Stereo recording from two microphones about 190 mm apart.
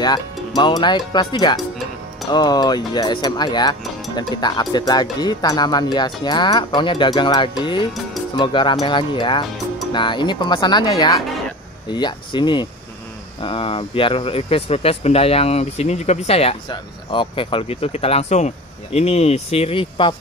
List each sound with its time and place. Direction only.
0.6 s speech: 25° left (ahead or behind)